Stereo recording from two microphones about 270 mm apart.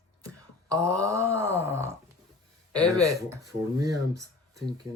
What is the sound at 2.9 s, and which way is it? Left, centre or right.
Speech, centre.